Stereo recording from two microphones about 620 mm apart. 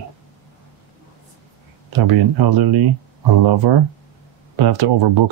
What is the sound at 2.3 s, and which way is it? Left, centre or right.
Speech, right.